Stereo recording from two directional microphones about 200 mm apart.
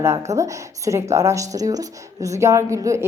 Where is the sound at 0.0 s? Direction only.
15° right (ahead or behind).